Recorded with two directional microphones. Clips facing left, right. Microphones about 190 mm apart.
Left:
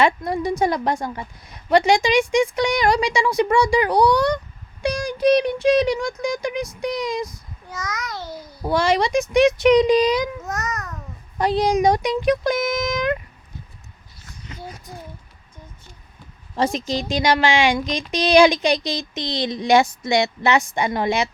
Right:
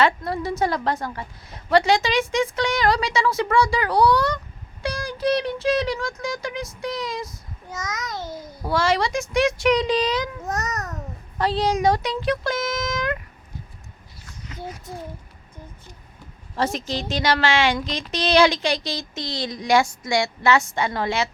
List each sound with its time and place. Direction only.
0.0 s a woman's voice: 15° left (ahead or behind)
7.7 s babbling: 20° right (ahead or behind)
8.6 s a woman's voice: 15° left (ahead or behind)
10.4 s babbling: 35° right (ahead or behind)
11.3 s speech: 15° left (ahead or behind)
16.6 s a woman's voice: 15° left (ahead or behind)